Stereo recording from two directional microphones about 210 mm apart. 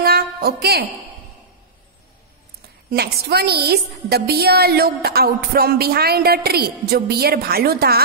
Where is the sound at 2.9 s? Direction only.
50° right (ahead or behind).